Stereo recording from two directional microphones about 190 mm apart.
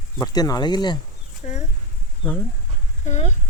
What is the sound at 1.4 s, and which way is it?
Speech, 40° left (ahead or behind).